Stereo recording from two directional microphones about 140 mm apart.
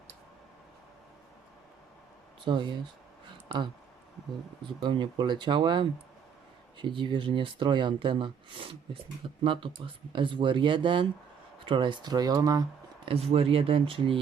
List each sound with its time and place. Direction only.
2.4 s speech: 35° right (ahead or behind)
4.6 s speech: 35° right (ahead or behind)
13.1 s speech: 45° right (ahead or behind)